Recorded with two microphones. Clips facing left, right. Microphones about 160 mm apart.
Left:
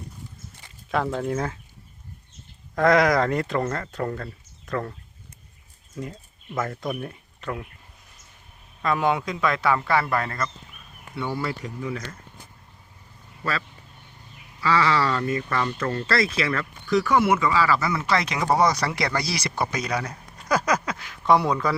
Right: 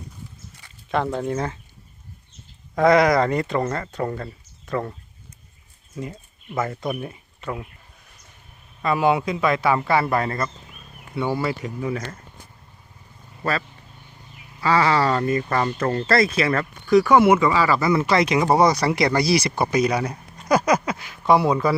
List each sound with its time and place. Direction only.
0.9 s speech: centre (ahead or behind)
2.7 s speech: centre (ahead or behind)
6.0 s speech: 5° right (ahead or behind)
8.8 s a man's voice: 5° right (ahead or behind)
9.6 s speech: 20° right (ahead or behind)
11.3 s a man's voice: 5° right (ahead or behind)
11.8 s speech: 55° right (ahead or behind)
13.4 s speech: 45° right (ahead or behind)
17.3 s a man's voice: 25° right (ahead or behind); by 21.5 s 5° right (ahead or behind)